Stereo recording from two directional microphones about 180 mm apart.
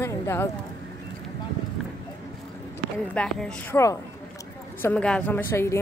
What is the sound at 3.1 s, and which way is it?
Speech, 10° left (ahead or behind).